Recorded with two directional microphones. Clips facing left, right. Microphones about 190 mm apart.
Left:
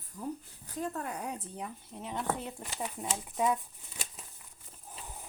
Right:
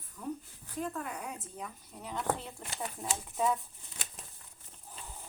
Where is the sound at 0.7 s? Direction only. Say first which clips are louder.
Left 1 dB; 40° left (ahead or behind).